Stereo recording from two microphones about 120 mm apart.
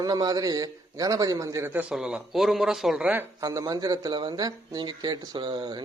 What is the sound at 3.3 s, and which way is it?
Speech, 30° right (ahead or behind).